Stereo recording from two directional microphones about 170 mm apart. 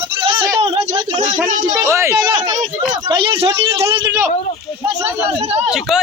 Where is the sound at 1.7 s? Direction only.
15° right (ahead or behind).